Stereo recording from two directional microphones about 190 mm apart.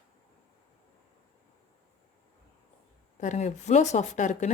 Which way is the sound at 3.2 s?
40° left (ahead or behind).